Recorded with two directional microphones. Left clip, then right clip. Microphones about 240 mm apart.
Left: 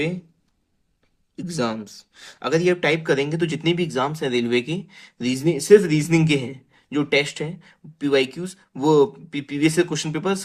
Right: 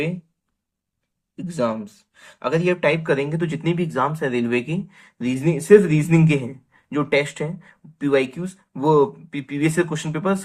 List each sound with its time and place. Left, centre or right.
1.4 s speech: left